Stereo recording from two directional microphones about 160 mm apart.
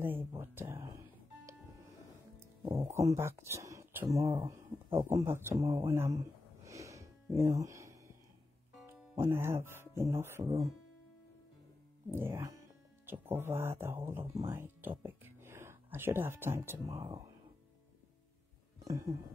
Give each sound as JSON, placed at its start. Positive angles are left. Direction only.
{"t": 0.0, "sound": "music", "side_deg": -15}
{"t": 2.7, "sound": "speech", "side_deg": -20}
{"t": 5.1, "sound": "speech", "side_deg": -15}
{"t": 12.1, "sound": "speech", "side_deg": -15}
{"t": 18.9, "sound": "music", "side_deg": -20}